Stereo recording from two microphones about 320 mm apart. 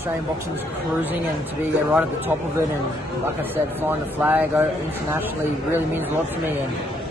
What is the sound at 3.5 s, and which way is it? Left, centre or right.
A man's voice, centre.